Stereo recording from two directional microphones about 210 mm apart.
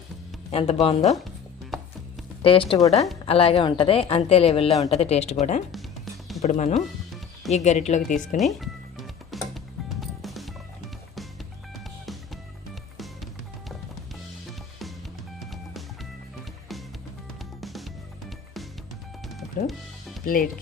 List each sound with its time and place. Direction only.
0.5 s speech: 30° left (ahead or behind)
2.4 s a woman's voice: 25° left (ahead or behind)
8.4 s music: centre (ahead or behind)
17.6 s music: centre (ahead or behind)
20.2 s speech: 40° left (ahead or behind)